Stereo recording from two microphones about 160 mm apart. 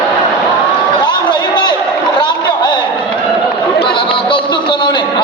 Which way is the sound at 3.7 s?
80° left.